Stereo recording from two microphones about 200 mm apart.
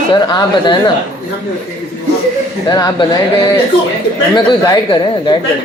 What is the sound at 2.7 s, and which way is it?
Speech, 20° left (ahead or behind).